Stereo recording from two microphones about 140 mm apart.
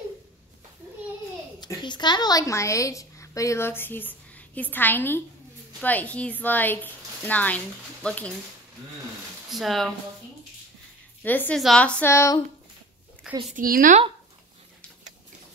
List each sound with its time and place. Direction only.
1.6 s a woman's voice: 30° left (ahead or behind); by 8.3 s 10° left (ahead or behind)
9.5 s speech: centre (ahead or behind)
11.2 s a woman's voice: 10° left (ahead or behind)
12.1 s a woman's voice: 20° left (ahead or behind)
13.5 s speech: 85° right